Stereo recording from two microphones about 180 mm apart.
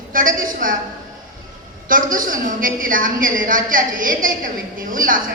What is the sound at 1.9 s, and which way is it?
A woman's voice, 50° right (ahead or behind).